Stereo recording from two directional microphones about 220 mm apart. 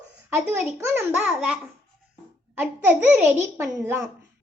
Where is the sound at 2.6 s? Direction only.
5° right (ahead or behind).